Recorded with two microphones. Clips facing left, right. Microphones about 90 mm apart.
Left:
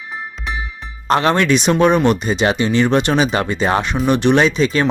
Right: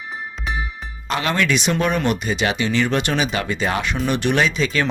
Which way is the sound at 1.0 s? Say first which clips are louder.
Left 6 dB; 40° left (ahead or behind).